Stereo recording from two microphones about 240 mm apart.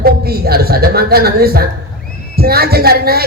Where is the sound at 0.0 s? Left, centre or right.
Right.